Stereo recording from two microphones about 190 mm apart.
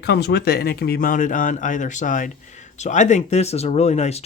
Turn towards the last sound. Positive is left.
turn(degrees=35)  # may be behind; listen again after turning